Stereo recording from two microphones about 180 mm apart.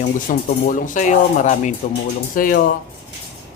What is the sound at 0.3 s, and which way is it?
Speech, 50° left (ahead or behind).